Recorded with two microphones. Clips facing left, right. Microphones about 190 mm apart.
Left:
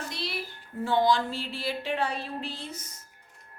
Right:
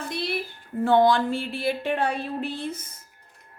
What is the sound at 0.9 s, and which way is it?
A woman's voice, 55° right (ahead or behind).